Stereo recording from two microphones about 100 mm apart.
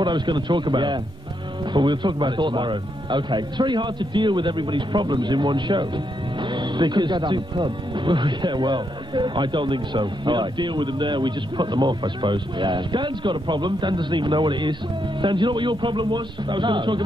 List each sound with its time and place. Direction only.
0.0 s speech: 50° right (ahead or behind)